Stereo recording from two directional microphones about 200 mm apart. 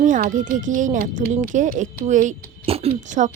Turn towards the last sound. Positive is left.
turn(degrees=-40)  # may be behind; listen again after turning